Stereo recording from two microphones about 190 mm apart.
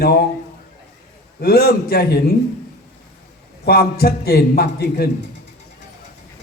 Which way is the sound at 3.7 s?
55° left (ahead or behind).